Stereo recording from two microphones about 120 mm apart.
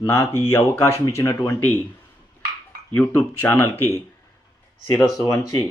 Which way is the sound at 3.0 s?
20° left (ahead or behind).